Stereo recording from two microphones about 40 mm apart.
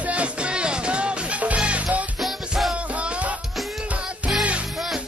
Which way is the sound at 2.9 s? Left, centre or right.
Right.